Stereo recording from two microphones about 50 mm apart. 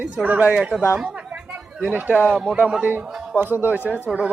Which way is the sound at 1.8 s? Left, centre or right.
Right.